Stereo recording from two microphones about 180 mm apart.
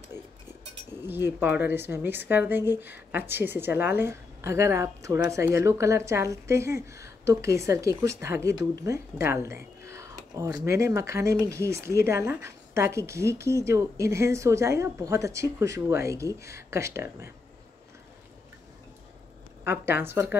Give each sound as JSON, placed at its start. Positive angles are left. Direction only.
{"t": 0.1, "sound": "a sound", "side_deg": -15}
{"t": 1.0, "sound": "speech", "side_deg": -10}
{"t": 19.6, "sound": "speech", "side_deg": -10}